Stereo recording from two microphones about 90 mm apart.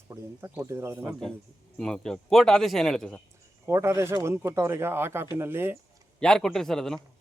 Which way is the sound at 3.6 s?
30° right (ahead or behind).